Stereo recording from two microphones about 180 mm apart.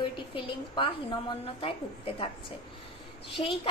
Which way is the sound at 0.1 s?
30° left (ahead or behind).